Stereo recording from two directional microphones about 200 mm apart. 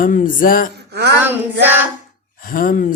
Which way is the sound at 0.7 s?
55° right (ahead or behind).